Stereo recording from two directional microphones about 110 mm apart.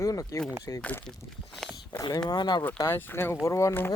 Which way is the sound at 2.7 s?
25° left (ahead or behind).